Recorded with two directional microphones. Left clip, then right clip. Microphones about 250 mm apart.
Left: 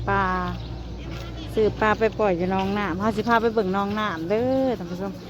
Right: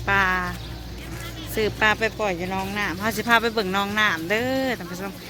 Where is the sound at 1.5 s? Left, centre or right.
Centre.